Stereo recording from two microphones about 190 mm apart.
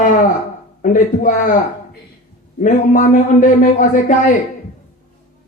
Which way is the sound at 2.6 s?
40° left (ahead or behind).